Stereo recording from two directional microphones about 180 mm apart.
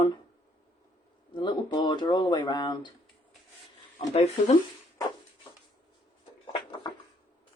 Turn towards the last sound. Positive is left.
turn(degrees=25)  # may be behind; listen again after turning